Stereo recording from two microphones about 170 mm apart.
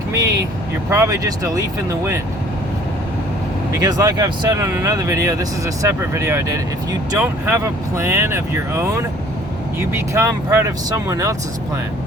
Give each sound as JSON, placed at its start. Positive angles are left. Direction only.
{"t": 0.1, "sound": "speech", "side_deg": -20}
{"t": 3.8, "sound": "speech", "side_deg": -20}